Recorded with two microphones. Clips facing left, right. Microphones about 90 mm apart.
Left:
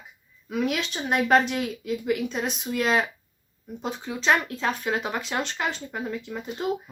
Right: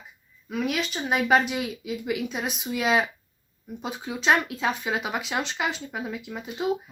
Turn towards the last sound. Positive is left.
turn(degrees=-5)  # may be behind; listen again after turning